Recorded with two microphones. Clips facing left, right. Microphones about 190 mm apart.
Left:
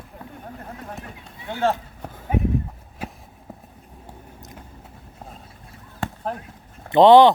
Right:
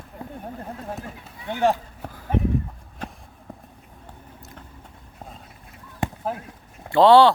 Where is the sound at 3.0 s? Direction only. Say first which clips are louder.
Left 2 dB; 10° left (ahead or behind).